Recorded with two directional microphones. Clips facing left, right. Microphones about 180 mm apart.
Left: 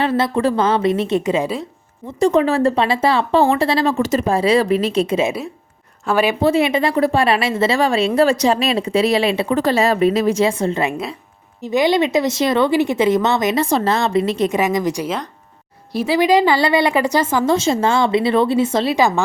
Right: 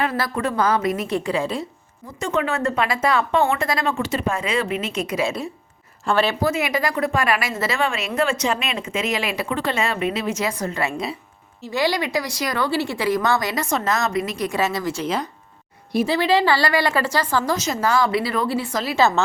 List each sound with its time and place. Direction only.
0.0 s speech: 30° left (ahead or behind)
2.1 s speech: 35° left (ahead or behind)
6.1 s speech: 15° left (ahead or behind)
6.4 s speech: 30° left (ahead or behind)
15.0 s speech: centre (ahead or behind)
16.0 s speech: 15° left (ahead or behind)
18.9 s speech: 15° left (ahead or behind)